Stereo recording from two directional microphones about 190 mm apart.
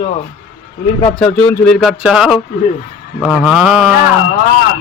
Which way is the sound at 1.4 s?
10° left (ahead or behind).